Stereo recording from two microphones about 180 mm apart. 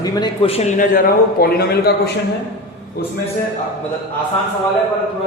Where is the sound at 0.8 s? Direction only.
55° left (ahead or behind).